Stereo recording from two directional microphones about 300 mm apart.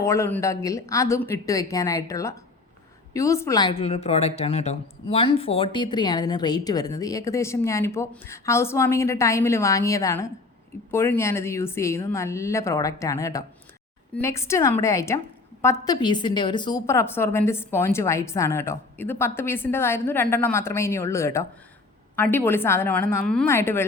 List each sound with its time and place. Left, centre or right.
0.0 s a woman's voice: centre